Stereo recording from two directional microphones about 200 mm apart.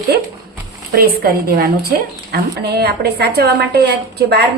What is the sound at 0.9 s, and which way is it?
A woman's voice, 50° right (ahead or behind).